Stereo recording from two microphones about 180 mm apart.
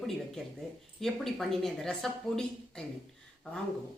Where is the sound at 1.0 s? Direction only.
Centre (ahead or behind).